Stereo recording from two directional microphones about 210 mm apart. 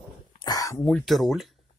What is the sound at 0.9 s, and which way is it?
Speech, centre (ahead or behind).